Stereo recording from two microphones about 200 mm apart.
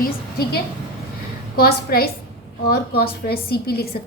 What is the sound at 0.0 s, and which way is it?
A woman's voice, 50° left (ahead or behind).